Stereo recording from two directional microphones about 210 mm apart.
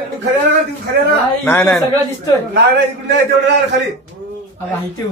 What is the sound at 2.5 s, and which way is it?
Speech, 50° right (ahead or behind).